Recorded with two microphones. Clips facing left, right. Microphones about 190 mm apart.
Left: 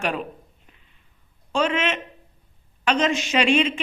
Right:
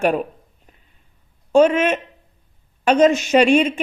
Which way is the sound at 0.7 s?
40° right (ahead or behind).